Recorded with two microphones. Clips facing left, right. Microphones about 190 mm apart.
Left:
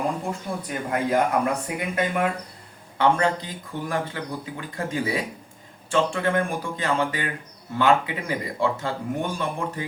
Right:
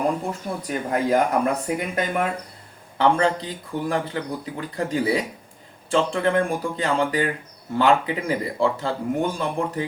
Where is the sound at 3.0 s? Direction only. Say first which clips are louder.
Right 2 dB; 30° right (ahead or behind).